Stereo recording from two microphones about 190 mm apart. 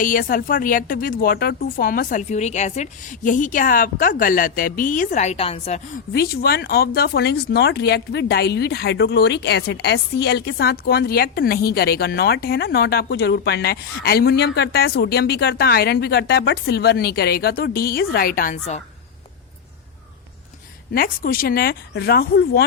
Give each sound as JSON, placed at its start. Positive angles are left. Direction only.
{"t": 0.0, "sound": "a woman's voice", "side_deg": 45}
{"t": 6.1, "sound": "a woman's voice", "side_deg": 55}
{"t": 20.9, "sound": "a woman's voice", "side_deg": 50}